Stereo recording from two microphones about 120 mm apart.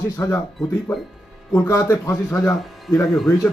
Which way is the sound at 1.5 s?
25° left (ahead or behind).